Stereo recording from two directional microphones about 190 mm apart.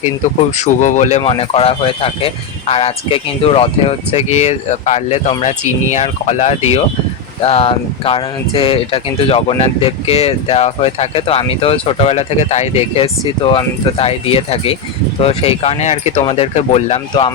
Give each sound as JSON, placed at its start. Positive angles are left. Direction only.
{"t": 0.5, "sound": "speech", "side_deg": 40}